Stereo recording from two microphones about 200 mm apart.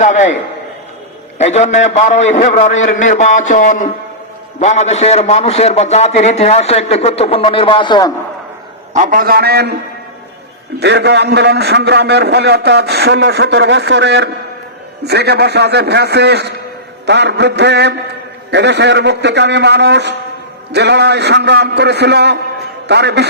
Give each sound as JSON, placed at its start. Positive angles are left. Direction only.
{"t": 0.0, "sound": "a man's voice", "side_deg": 35}
{"t": 1.4, "sound": "a man's voice", "side_deg": 35}
{"t": 8.9, "sound": "a man's voice", "side_deg": -40}
{"t": 10.8, "sound": "a man's voice", "side_deg": -55}